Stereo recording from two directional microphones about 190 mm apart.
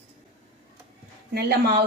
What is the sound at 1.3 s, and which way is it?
Speech, 55° right (ahead or behind).